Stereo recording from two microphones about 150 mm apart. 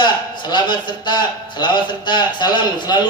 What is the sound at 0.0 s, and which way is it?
A man's voice, 30° left (ahead or behind).